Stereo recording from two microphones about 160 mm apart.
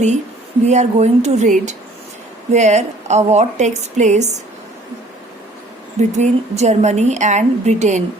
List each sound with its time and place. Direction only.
0.7 s a woman's voice: 45° right (ahead or behind)
6.0 s a woman's voice: 45° right (ahead or behind)